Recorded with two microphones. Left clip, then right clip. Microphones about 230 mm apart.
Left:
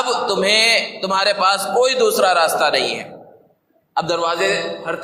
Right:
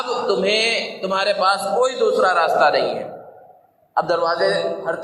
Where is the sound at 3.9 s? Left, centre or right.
Left.